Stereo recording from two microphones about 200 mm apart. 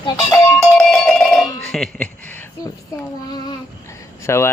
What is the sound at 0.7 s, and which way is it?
A man's voice, centre (ahead or behind).